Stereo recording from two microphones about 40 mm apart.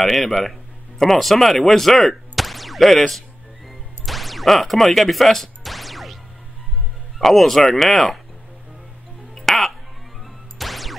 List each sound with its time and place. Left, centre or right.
0.0 s a sound: centre
7.2 s speech: centre
9.3 s music: centre